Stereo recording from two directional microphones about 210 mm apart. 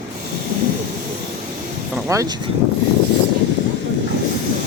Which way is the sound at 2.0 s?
15° right (ahead or behind).